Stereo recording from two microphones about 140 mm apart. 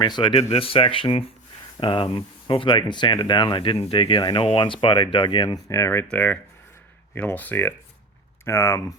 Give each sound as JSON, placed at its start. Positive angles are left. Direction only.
{"t": 0.0, "sound": "speech", "side_deg": 35}
{"t": 5.6, "sound": "speech", "side_deg": 20}